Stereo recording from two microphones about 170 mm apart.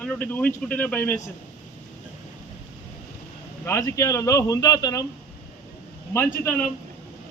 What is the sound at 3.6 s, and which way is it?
A man's voice, 15° left (ahead or behind).